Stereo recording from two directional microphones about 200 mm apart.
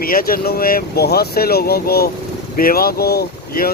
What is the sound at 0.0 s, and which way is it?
Speech, 45° left (ahead or behind).